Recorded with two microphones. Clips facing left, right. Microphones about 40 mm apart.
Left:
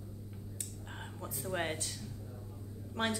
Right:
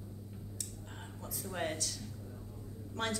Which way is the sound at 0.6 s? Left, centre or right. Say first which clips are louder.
Left 2 dB; left.